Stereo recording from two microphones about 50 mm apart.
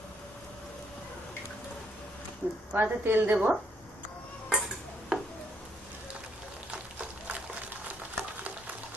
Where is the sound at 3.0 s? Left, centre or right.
Right.